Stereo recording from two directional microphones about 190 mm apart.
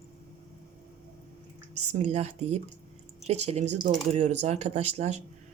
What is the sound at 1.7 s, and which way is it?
Speech, 35° right (ahead or behind).